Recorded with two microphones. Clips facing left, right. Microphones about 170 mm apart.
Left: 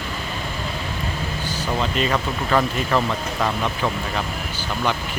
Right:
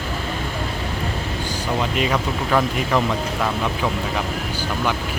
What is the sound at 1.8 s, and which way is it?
Speech, 10° right (ahead or behind).